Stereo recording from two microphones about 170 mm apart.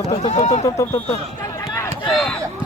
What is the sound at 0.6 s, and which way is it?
Speech, 20° left (ahead or behind).